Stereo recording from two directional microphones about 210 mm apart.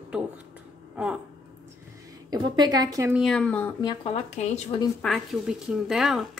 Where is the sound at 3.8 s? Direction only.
25° left (ahead or behind).